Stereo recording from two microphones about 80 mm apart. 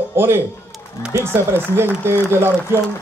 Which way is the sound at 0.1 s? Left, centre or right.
Right.